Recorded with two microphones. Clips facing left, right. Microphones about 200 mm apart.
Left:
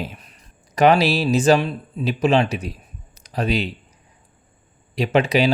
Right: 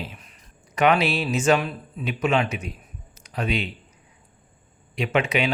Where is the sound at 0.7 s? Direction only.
35° left (ahead or behind).